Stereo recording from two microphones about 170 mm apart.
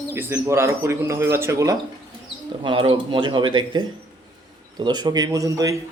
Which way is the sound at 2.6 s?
30° right (ahead or behind).